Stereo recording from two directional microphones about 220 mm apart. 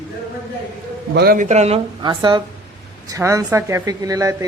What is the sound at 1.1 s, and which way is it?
Speech, 40° right (ahead or behind).